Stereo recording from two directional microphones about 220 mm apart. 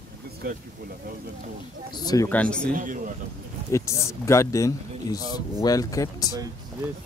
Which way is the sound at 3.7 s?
15° left (ahead or behind).